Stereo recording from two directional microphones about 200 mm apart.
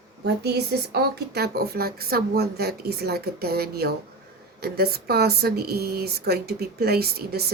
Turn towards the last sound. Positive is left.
turn(degrees=-50)  # may be behind; listen again after turning